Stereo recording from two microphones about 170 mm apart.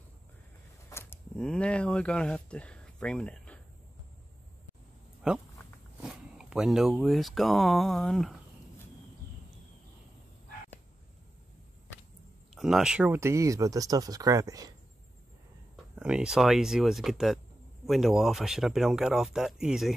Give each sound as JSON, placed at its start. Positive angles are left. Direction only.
{"t": 0.8, "sound": "a sound", "side_deg": 15}
{"t": 1.3, "sound": "speech", "side_deg": 5}
{"t": 5.2, "sound": "speech", "side_deg": -5}
{"t": 12.5, "sound": "speech", "side_deg": -5}
{"t": 15.7, "sound": "speech", "side_deg": -5}